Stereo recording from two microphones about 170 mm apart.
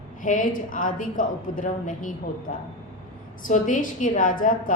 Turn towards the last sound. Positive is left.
turn(degrees=50)  # may be behind; listen again after turning